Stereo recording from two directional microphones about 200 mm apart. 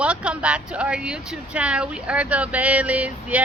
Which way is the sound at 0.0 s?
5° right (ahead or behind).